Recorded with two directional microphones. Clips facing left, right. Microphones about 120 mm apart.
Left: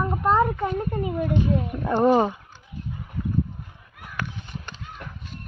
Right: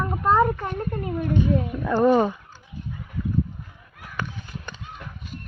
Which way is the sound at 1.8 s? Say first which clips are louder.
Even; 20° left (ahead or behind).